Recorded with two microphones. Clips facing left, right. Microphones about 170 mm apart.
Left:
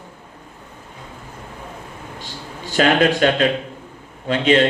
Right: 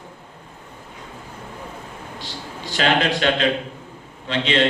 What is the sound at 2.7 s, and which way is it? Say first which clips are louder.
A man's voice: left 4 dB; 45° left (ahead or behind).